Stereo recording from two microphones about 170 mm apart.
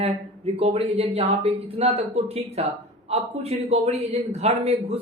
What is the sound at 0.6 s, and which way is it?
A man's voice, 35° right (ahead or behind).